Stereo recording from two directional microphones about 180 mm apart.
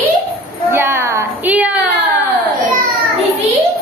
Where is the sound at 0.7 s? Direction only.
15° right (ahead or behind).